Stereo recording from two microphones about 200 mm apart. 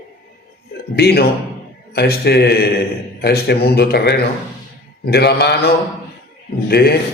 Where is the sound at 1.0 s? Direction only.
55° left (ahead or behind).